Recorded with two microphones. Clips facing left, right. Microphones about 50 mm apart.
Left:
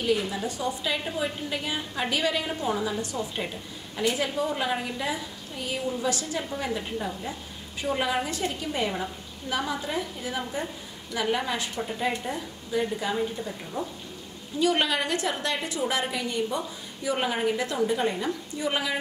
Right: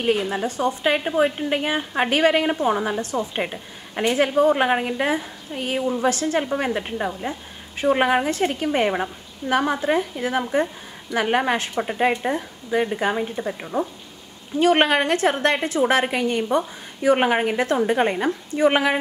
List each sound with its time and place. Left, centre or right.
0.0 s a woman's voice: right